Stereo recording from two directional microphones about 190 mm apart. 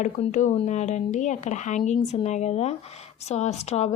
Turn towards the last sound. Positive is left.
turn(degrees=35)  # may be behind; listen again after turning